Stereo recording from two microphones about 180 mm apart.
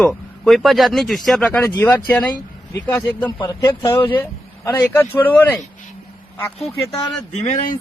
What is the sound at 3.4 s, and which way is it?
Speech, 20° left (ahead or behind).